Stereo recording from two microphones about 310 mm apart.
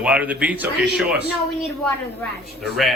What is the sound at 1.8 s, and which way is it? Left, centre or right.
Speech, centre.